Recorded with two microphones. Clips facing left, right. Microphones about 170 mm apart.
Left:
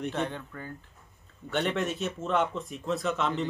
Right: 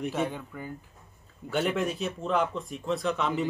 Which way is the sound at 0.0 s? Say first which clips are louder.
Right 2 dB; 5° right (ahead or behind).